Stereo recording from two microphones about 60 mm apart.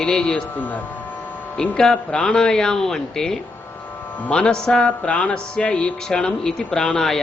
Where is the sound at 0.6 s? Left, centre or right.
Left.